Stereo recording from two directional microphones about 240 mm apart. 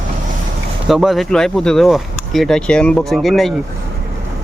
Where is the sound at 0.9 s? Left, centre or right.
Centre.